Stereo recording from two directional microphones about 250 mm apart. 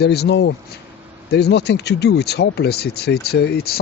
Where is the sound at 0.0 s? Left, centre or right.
Left.